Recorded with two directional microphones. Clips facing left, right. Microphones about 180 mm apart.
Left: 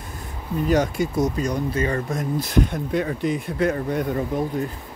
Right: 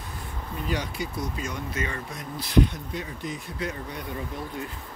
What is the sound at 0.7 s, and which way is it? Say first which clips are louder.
Speech: left 11 dB; 45° left (ahead or behind).